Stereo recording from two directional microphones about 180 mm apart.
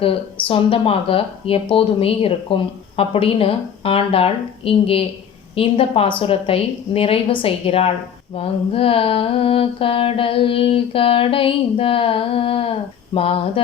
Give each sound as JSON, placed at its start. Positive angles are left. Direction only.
{"t": 0.0, "sound": "speech", "side_deg": 30}